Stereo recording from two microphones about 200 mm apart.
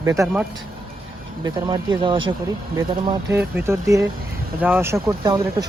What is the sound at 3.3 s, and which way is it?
Speech, 15° right (ahead or behind).